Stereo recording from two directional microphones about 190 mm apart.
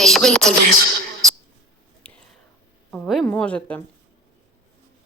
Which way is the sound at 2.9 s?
Centre (ahead or behind).